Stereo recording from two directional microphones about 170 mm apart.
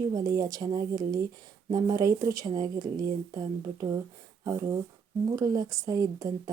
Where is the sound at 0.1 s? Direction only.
20° right (ahead or behind).